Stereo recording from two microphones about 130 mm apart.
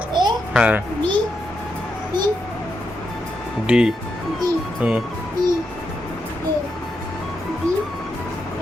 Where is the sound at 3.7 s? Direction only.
5° right (ahead or behind).